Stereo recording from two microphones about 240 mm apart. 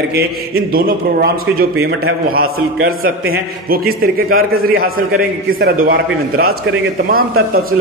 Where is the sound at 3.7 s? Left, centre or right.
Right.